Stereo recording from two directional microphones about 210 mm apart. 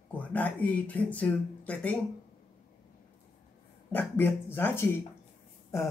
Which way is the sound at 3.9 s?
10° left (ahead or behind).